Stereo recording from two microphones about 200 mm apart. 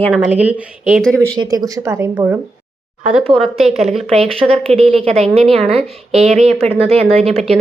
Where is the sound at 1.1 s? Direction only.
15° right (ahead or behind).